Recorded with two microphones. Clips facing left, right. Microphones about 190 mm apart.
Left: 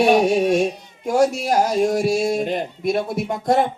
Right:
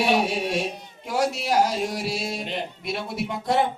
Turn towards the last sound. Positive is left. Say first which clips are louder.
# left 5 dB
turn(degrees=45)  # may be behind; listen again after turning